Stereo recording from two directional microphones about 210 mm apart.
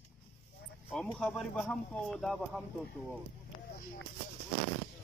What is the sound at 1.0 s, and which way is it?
Speech, 5° left (ahead or behind).